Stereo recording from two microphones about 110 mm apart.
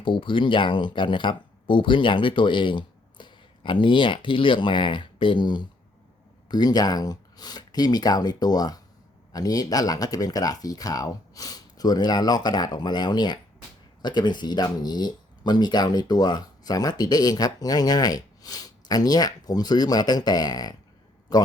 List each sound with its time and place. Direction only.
0.0 s a man's voice: 50° left (ahead or behind)